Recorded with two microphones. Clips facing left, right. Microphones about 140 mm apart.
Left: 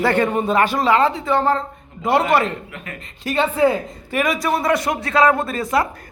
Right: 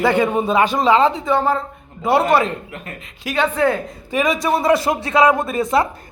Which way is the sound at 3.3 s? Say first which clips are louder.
Left 1 dB; 5° left (ahead or behind).